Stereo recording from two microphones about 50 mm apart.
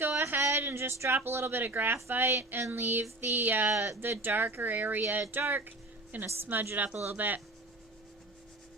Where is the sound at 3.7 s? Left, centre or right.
Right.